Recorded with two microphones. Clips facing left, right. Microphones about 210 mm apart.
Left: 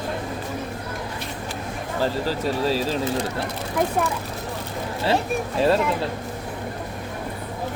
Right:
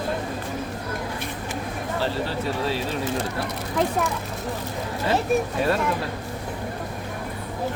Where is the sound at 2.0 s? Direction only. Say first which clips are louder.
Left 4 dB; 40° left (ahead or behind).